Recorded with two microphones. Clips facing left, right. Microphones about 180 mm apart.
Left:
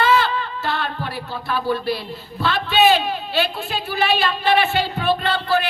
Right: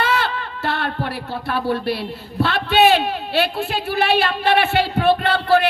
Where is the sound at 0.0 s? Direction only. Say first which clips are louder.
Left 3 dB; 60° right (ahead or behind).